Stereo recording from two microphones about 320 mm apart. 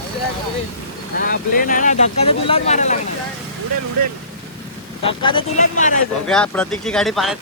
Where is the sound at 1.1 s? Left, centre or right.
Left.